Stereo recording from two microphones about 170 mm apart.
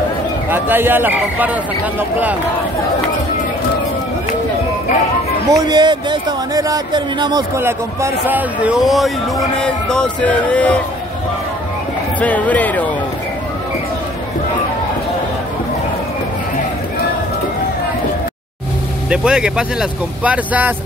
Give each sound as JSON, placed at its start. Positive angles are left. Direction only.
{"t": 0.5, "sound": "speech", "side_deg": -10}
{"t": 5.5, "sound": "speech", "side_deg": -25}
{"t": 9.6, "sound": "music", "side_deg": 5}
{"t": 12.2, "sound": "music", "side_deg": 10}
{"t": 19.0, "sound": "speech", "side_deg": -5}